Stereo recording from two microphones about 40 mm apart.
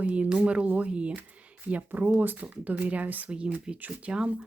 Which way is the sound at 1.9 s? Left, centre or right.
Right.